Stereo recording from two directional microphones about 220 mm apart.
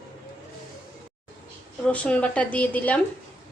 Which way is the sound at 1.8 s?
5° left (ahead or behind).